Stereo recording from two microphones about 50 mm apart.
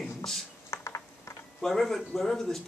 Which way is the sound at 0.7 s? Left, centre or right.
Left.